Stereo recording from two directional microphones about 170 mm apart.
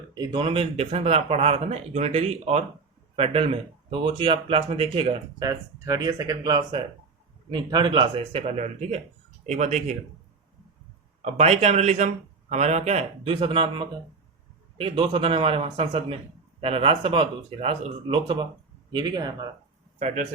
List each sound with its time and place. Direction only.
0.1 s a man's voice: 25° right (ahead or behind)
5.5 s a man's voice: 20° right (ahead or behind); by 10.0 s 40° right (ahead or behind)
11.2 s a man's voice: 40° right (ahead or behind)
20.0 s a man's voice: 40° right (ahead or behind)